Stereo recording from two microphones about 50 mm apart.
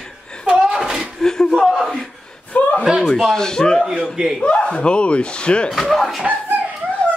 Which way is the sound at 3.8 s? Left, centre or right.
Centre.